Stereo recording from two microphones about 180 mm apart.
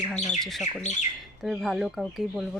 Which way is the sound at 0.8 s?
40° left (ahead or behind).